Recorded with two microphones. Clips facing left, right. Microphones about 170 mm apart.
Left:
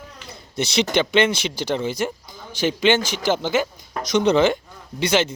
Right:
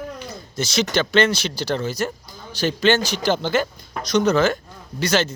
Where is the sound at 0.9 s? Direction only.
15° left (ahead or behind).